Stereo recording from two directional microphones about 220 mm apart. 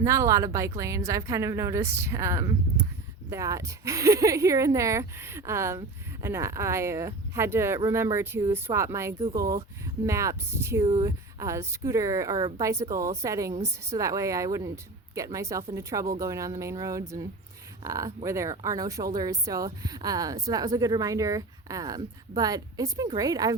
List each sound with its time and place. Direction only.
0.0 s speech: 15° right (ahead or behind)